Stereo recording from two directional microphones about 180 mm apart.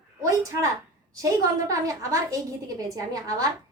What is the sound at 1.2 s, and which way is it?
A woman's voice, 20° right (ahead or behind).